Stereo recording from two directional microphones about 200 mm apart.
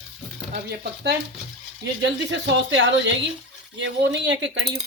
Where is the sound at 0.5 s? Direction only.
55° right (ahead or behind).